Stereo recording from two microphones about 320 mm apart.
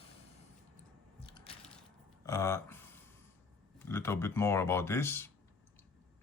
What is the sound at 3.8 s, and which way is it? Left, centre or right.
Speech, centre.